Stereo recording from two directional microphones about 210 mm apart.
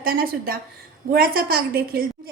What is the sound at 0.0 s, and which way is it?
A woman's voice, 45° right (ahead or behind).